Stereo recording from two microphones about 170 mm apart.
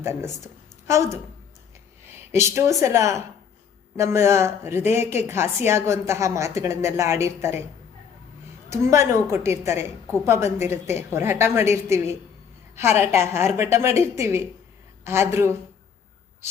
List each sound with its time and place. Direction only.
0.0 s a woman's voice: 15° right (ahead or behind)
8.7 s a woman's voice: 15° right (ahead or behind)